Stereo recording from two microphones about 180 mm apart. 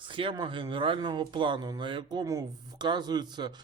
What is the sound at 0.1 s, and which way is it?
A man's voice, 30° right (ahead or behind).